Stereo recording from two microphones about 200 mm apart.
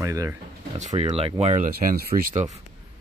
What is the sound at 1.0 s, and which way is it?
Speech, 30° right (ahead or behind).